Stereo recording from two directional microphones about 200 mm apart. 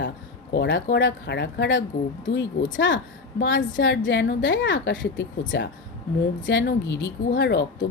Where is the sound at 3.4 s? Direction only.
65° left (ahead or behind).